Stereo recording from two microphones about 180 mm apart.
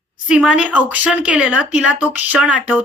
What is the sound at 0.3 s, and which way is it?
A woman's voice, 5° right (ahead or behind).